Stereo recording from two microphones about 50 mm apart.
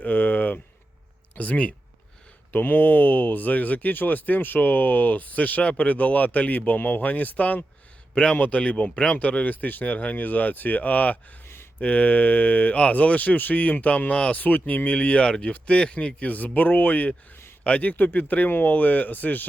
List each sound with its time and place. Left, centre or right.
0.0 s a sound: left
1.4 s speech: left
2.5 s speech: left